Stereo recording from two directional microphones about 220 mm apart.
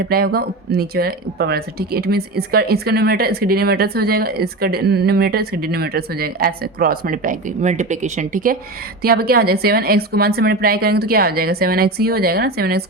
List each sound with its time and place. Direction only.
0.0 s speech: 45° right (ahead or behind)